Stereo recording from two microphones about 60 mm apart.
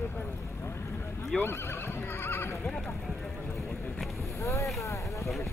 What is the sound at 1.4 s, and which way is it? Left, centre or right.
Neigh, left.